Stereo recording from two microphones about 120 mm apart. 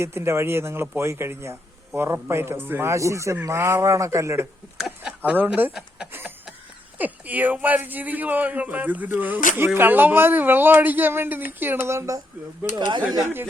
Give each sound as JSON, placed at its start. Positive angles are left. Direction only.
{"t": 0.0, "sound": "speech", "side_deg": -20}
{"t": 5.0, "sound": "speech", "side_deg": -10}
{"t": 12.7, "sound": "speech", "side_deg": -40}
{"t": 13.2, "sound": "speech", "side_deg": -20}